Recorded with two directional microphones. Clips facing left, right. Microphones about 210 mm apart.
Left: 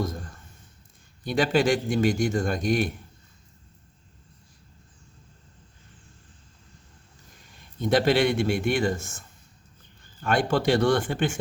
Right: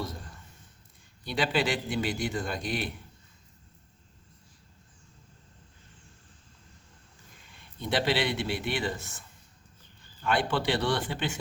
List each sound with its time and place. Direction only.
1.2 s a man's voice: 45° left (ahead or behind)
7.4 s a man's voice: 40° left (ahead or behind)
10.2 s a man's voice: 45° left (ahead or behind)